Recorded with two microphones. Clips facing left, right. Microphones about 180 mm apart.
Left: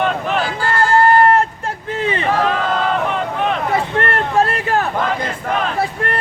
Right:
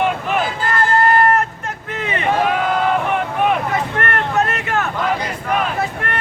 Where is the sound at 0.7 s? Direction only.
30° left (ahead or behind).